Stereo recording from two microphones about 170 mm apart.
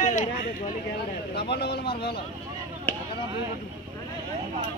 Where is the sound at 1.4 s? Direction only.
75° left (ahead or behind).